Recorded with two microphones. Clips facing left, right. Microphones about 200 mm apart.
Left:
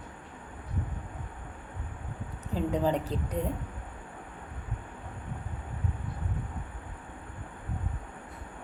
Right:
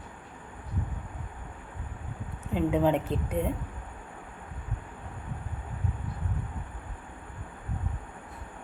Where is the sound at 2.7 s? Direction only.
5° right (ahead or behind).